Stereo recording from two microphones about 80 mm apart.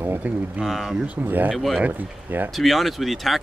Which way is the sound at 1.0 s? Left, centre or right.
Right.